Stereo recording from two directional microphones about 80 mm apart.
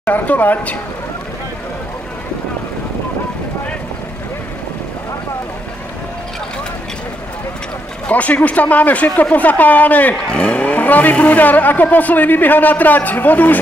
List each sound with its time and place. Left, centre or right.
0.0 s speech: left
8.1 s speech: centre